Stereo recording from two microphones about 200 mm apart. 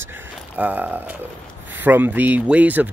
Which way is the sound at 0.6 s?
10° right (ahead or behind).